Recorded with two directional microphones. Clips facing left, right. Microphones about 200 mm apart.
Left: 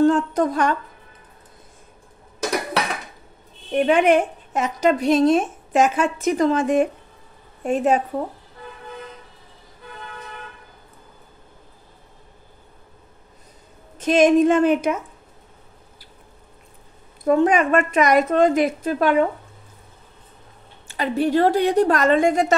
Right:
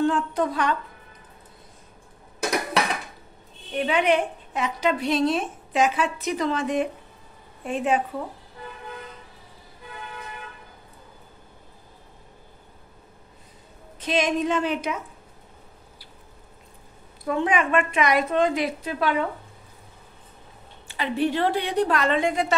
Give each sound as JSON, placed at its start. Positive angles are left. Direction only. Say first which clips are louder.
{"t": 0.0, "sound": "speech", "louder": "left 6 dB", "side_deg": 45}
{"t": 3.7, "sound": "a woman's voice", "louder": "left 6 dB", "side_deg": 50}
{"t": 13.9, "sound": "a woman's voice", "louder": "left 9 dB", "side_deg": 45}
{"t": 17.2, "sound": "a woman's voice", "louder": "left 7 dB", "side_deg": 45}
{"t": 20.9, "sound": "a woman's voice", "louder": "left 5 dB", "side_deg": 40}